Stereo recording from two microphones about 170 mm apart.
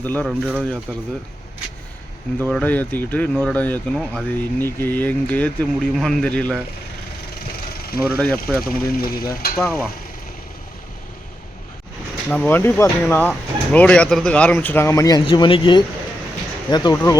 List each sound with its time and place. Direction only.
0.0 s speech: 10° left (ahead or behind)
2.5 s speech: 5° left (ahead or behind)
7.3 s vehicle: 65° left (ahead or behind)
8.0 s speech: 5° left (ahead or behind)
8.6 s speech: 60° left (ahead or behind)
9.6 s speech: 10° left (ahead or behind)
12.3 s speech: 10° left (ahead or behind)